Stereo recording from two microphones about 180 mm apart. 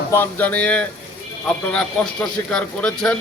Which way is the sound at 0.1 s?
10° left (ahead or behind).